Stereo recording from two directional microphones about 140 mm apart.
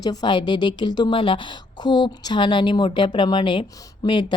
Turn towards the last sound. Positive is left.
turn(degrees=25)  # may be behind; listen again after turning